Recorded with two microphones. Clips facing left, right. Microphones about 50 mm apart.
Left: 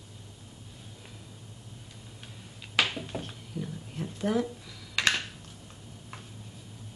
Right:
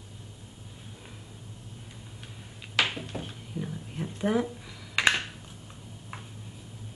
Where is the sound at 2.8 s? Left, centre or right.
Centre.